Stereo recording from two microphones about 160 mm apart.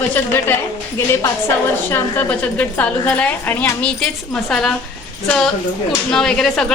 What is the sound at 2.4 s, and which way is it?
A woman's voice, 10° left (ahead or behind).